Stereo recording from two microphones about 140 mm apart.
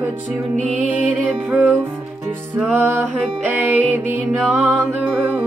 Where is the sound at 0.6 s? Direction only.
65° right (ahead or behind).